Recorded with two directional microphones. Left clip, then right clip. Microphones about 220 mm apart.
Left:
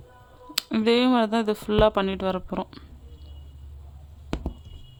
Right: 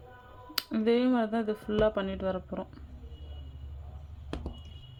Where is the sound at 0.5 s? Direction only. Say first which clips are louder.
Left 6 dB; 30° left (ahead or behind).